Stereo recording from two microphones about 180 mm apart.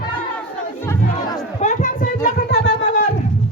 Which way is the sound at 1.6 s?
45° left (ahead or behind).